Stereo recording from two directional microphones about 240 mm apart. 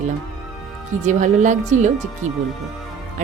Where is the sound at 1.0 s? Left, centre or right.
Right.